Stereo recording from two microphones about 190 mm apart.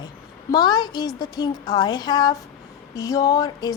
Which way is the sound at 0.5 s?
20° left (ahead or behind).